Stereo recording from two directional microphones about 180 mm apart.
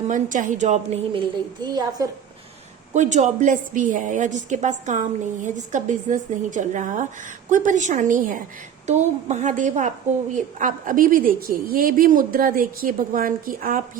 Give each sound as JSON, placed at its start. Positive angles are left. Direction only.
{"t": 0.1, "sound": "a woman's voice", "side_deg": -45}
{"t": 1.6, "sound": "a woman's voice", "side_deg": -20}
{"t": 2.9, "sound": "a woman's voice", "side_deg": -40}